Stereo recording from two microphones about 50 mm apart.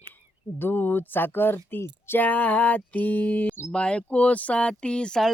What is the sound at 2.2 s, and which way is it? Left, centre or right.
Mantra, left.